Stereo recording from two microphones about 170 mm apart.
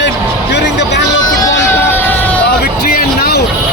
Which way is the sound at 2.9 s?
65° left (ahead or behind).